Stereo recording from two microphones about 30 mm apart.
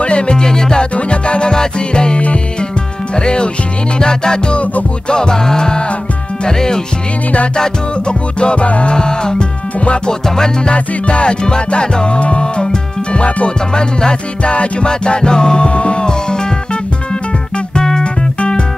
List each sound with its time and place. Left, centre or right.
0.0 s music: left
0.4 s music: left
0.9 s music: left
1.5 s music: left
3.2 s music: left
8.4 s music: left
8.6 s music: left
8.9 s music: left
10.6 s music: left
13.7 s music: left
14.5 s music: left
14.9 s music: left